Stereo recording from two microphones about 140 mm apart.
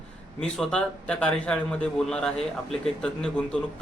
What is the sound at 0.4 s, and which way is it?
A man's voice, 5° left (ahead or behind).